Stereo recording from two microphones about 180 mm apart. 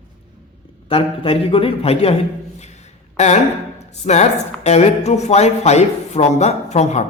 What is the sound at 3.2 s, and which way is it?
A man's voice, 40° left (ahead or behind).